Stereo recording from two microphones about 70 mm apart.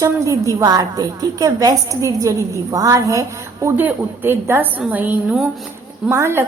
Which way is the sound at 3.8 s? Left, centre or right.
Right.